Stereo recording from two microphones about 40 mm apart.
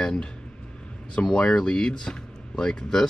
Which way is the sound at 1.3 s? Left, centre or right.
Left.